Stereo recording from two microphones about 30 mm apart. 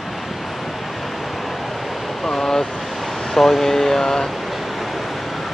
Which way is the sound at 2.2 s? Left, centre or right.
Centre.